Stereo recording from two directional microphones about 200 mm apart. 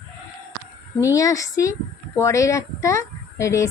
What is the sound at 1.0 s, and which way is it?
A woman's voice, 15° left (ahead or behind).